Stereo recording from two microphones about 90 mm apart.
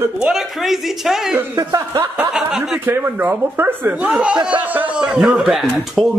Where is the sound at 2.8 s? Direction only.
20° right (ahead or behind).